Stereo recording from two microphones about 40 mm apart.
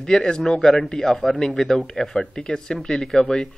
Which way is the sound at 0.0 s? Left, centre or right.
Centre.